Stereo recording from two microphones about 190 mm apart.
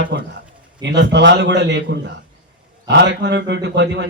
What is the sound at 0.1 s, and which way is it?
A man's voice, 60° right (ahead or behind).